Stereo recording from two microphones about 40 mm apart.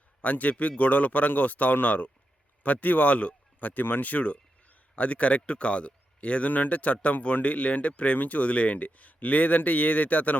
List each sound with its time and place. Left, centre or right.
0.2 s a man's voice: left
6.5 s speech: left